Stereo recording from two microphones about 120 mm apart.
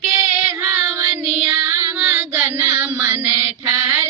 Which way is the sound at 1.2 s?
10° right (ahead or behind).